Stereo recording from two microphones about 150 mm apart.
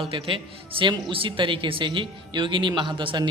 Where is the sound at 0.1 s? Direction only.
35° right (ahead or behind).